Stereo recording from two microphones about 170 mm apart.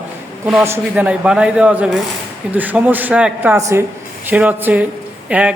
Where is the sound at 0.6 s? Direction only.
10° right (ahead or behind).